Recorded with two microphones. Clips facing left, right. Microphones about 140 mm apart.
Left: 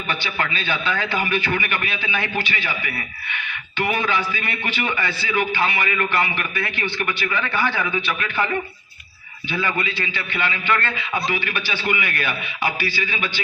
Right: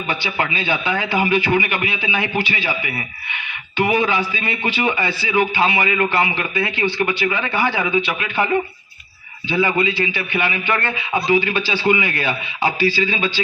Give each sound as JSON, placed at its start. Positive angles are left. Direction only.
{"t": 0.1, "sound": "a man's voice", "side_deg": -20}